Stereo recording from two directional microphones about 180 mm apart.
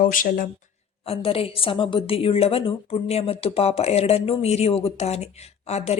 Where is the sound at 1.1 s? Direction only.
30° left (ahead or behind).